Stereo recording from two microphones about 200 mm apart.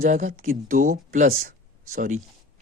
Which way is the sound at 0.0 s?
40° right (ahead or behind).